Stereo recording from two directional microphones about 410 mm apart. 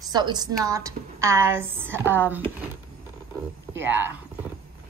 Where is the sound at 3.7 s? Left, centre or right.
Centre.